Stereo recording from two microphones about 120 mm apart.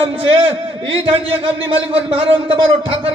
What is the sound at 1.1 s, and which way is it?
A man's voice, 45° right (ahead or behind).